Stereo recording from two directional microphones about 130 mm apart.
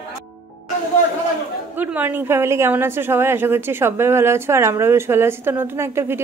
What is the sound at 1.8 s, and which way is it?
A woman's voice, 15° right (ahead or behind).